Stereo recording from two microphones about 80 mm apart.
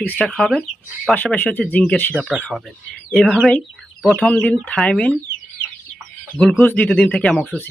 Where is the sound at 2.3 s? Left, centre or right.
Centre.